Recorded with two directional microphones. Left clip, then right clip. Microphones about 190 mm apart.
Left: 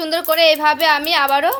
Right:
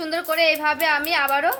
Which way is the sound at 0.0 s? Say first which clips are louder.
Left 6 dB; 40° left (ahead or behind).